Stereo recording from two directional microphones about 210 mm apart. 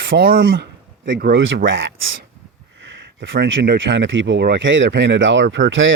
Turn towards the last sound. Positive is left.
turn(degrees=-65)  # may be behind; listen again after turning